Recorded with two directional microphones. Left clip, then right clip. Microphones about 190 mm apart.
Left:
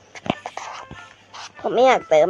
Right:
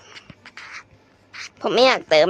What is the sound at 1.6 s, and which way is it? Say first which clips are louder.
Speech: left 1 dB; 25° right (ahead or behind).